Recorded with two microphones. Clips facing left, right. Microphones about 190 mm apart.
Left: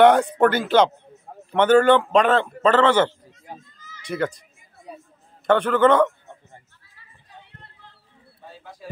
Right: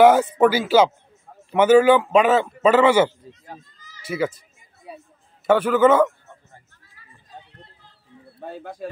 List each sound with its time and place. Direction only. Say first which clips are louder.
0.0 s a man's voice: right 1 dB; 5° right (ahead or behind)
5.5 s speech: right 1 dB; 5° right (ahead or behind)
8.4 s speech: right 10 dB; 55° right (ahead or behind)